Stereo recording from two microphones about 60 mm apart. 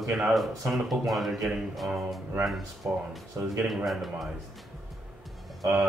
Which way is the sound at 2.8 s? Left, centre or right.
Right.